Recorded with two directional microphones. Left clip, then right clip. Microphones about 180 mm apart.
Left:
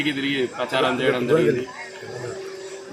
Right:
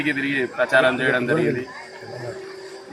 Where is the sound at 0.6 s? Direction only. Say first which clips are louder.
Right 5 dB; 30° right (ahead or behind).